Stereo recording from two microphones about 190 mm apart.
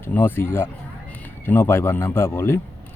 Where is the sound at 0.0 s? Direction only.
10° left (ahead or behind).